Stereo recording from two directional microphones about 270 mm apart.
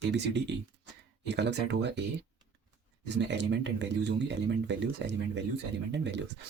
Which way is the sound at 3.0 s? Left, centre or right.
Right.